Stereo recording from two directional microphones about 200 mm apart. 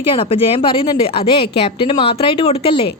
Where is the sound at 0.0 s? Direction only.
25° left (ahead or behind).